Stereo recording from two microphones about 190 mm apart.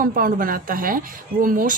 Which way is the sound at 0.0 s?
50° right (ahead or behind).